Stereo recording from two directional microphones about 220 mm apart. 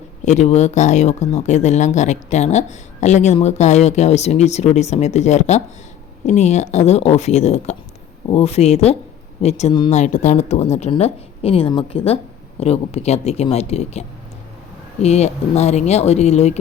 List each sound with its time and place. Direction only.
0.3 s speech: 30° left (ahead or behind)
15.0 s speech: 30° left (ahead or behind)